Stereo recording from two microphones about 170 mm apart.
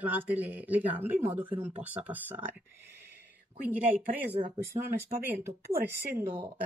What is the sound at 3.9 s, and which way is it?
Speech, 50° right (ahead or behind).